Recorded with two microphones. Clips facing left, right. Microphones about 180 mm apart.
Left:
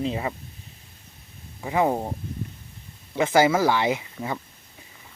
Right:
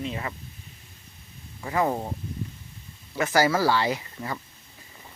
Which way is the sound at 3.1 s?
20° left (ahead or behind).